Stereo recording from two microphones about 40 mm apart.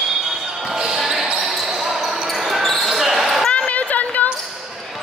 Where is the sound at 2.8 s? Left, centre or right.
Centre.